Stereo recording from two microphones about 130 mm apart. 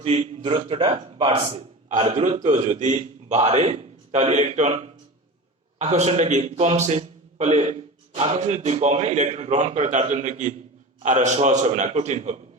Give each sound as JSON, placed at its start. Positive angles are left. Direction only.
{"t": 0.0, "sound": "a man's voice", "side_deg": -55}